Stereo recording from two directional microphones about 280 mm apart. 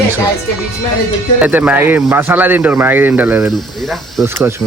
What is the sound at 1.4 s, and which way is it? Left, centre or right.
Speech, centre.